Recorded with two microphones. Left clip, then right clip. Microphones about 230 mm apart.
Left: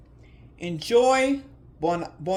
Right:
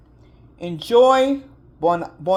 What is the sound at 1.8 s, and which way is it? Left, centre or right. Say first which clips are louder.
Speech: right 7 dB; centre.